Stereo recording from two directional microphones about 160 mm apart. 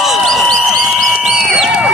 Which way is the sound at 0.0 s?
Centre (ahead or behind).